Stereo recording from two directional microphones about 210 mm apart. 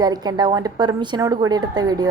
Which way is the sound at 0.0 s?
20° right (ahead or behind).